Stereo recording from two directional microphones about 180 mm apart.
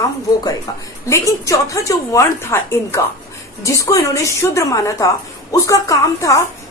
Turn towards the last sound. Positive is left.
turn(degrees=20)  # may be behind; listen again after turning